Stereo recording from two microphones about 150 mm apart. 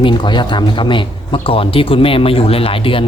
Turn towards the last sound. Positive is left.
turn(degrees=35)  # may be behind; listen again after turning